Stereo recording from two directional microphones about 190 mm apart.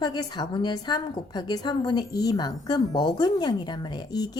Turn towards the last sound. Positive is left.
turn(degrees=20)  # may be behind; listen again after turning